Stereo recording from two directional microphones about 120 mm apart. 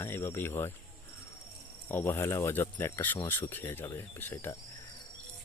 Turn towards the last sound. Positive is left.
turn(degrees=20)  # may be behind; listen again after turning